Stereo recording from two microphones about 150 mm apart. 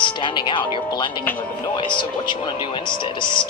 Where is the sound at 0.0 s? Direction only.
30° left (ahead or behind).